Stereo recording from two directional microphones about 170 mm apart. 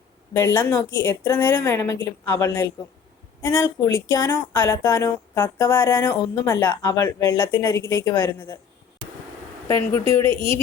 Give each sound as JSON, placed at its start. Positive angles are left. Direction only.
{"t": 0.3, "sound": "speech", "side_deg": 15}
{"t": 9.6, "sound": "speech", "side_deg": 15}
{"t": 10.2, "sound": "speech", "side_deg": -35}